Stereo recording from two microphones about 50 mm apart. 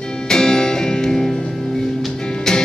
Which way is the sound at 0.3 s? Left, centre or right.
Centre.